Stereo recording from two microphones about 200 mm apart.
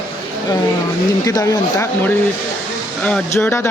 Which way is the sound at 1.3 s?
15° left (ahead or behind).